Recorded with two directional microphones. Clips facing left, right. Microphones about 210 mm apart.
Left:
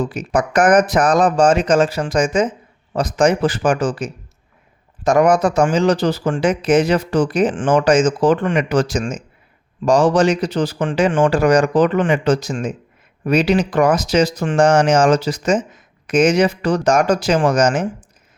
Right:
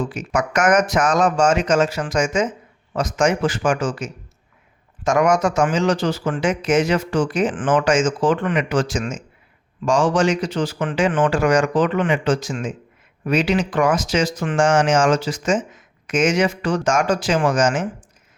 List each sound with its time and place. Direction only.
0.0 s speech: 35° left (ahead or behind)